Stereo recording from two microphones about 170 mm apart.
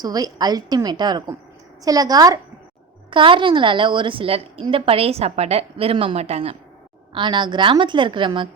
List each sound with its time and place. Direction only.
0.0 s a woman's voice: 25° right (ahead or behind)